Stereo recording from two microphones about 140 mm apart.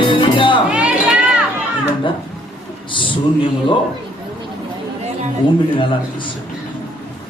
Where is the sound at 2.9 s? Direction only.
35° left (ahead or behind).